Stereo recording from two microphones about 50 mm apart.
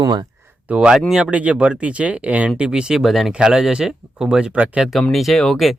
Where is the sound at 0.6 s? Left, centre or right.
Right.